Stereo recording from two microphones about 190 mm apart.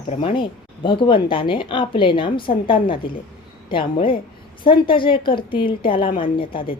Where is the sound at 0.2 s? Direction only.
25° left (ahead or behind).